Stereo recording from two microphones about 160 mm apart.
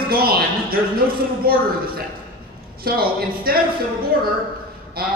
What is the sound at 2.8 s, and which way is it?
Speech, 70° right (ahead or behind).